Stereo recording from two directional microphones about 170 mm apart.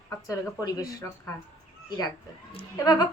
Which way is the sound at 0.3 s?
20° left (ahead or behind).